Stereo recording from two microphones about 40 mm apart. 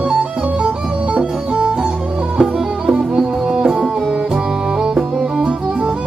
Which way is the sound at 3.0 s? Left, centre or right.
Right.